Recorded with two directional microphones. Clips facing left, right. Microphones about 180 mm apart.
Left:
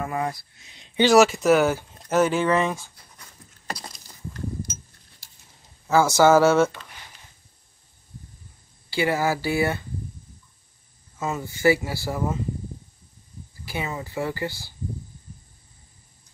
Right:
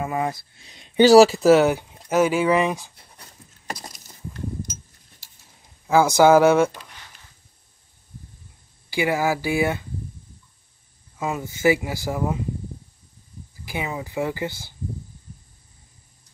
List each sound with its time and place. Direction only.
0.0 s speech: 20° right (ahead or behind)
0.7 s speech: 45° right (ahead or behind)
1.1 s speech: 35° right (ahead or behind)
1.6 s speech: 15° right (ahead or behind)
5.9 s speech: 15° right (ahead or behind)
8.9 s speech: 15° right (ahead or behind)
11.1 s speech: 10° right (ahead or behind)
13.7 s speech: 15° right (ahead or behind)